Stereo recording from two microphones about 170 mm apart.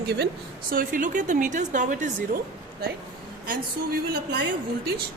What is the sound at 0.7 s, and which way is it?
A woman's voice, 55° right (ahead or behind).